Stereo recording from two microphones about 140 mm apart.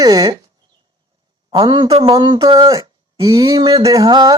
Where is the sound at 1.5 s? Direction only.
35° right (ahead or behind).